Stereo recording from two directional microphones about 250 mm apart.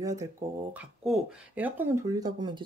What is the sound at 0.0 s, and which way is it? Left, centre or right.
Speech, centre.